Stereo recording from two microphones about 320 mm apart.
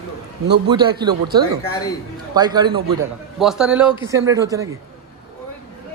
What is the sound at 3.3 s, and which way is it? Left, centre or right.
A man's voice, centre.